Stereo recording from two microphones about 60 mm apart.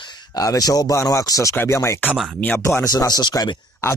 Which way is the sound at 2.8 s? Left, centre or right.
Left.